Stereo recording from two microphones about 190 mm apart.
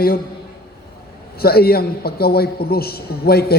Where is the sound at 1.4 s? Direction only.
55° left (ahead or behind).